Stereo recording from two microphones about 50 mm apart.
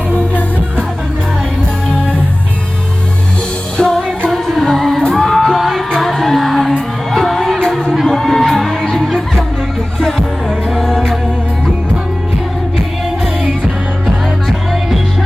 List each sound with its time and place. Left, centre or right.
3.8 s music: centre
4.3 s music: centre